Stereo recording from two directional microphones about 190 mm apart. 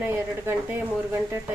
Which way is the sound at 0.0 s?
10° right (ahead or behind).